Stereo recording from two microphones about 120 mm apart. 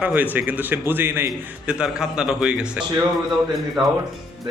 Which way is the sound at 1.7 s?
5° right (ahead or behind).